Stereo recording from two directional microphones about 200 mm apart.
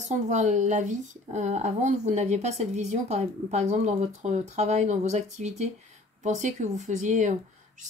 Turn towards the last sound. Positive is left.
turn(degrees=-40)  # may be behind; listen again after turning